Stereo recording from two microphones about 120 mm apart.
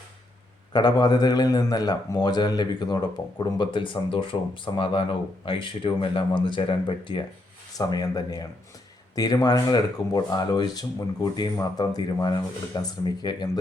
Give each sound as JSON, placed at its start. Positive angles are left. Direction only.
{"t": 0.7, "sound": "a man's voice", "side_deg": 35}
{"t": 7.8, "sound": "a man's voice", "side_deg": 35}